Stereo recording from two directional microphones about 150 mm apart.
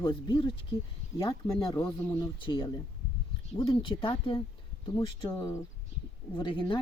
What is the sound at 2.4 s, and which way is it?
Speech, 30° left (ahead or behind).